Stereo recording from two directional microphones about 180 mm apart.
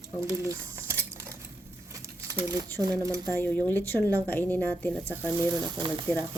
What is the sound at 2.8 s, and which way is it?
Speech, 20° right (ahead or behind).